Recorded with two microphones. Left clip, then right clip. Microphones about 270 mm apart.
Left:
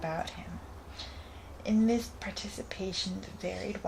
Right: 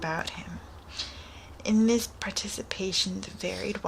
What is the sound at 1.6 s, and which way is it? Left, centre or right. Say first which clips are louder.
Speech: right 4 dB; centre.